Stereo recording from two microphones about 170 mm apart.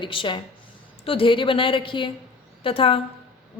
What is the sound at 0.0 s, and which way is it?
A woman's voice, 30° left (ahead or behind).